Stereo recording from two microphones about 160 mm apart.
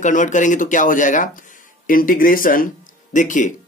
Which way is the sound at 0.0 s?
50° left (ahead or behind).